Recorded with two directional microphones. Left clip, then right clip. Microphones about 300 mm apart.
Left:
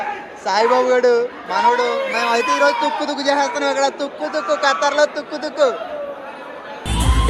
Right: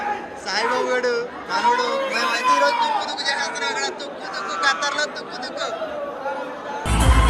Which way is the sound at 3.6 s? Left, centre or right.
Centre.